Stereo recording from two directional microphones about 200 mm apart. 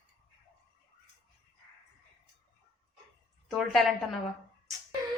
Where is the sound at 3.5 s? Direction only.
Centre (ahead or behind).